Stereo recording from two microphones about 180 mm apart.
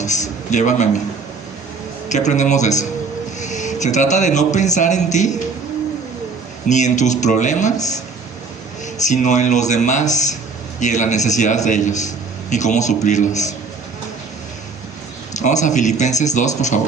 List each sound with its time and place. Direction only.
0.0 s a man's voice: 40° left (ahead or behind)
2.0 s a man's voice: 40° left (ahead or behind)
6.7 s a man's voice: 40° left (ahead or behind)
9.0 s a man's voice: 45° left (ahead or behind)
15.4 s a man's voice: 40° left (ahead or behind)